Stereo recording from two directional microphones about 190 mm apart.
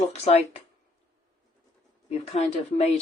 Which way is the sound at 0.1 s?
30° left (ahead or behind).